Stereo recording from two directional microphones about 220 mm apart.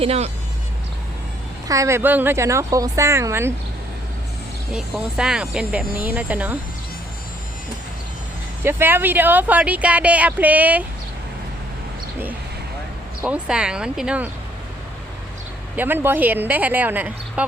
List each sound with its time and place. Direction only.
0.0 s speech: 30° right (ahead or behind)
1.6 s speech: 15° right (ahead or behind)
4.7 s speech: 5° right (ahead or behind)
8.6 s speech: 10° right (ahead or behind)
13.2 s speech: 5° right (ahead or behind)
15.7 s speech: 10° right (ahead or behind)